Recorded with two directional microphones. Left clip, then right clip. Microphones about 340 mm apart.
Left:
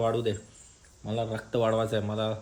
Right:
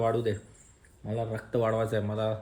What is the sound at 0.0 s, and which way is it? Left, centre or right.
A man's voice, centre.